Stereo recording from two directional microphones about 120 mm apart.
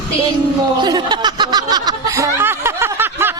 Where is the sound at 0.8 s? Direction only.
40° right (ahead or behind).